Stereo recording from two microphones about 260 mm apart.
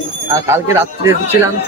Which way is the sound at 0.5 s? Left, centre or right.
Centre.